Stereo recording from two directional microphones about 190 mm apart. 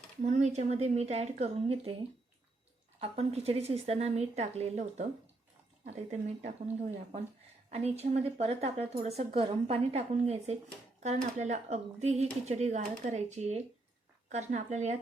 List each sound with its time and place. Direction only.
0.2 s speech: 40° right (ahead or behind)
6.1 s speech: 35° right (ahead or behind)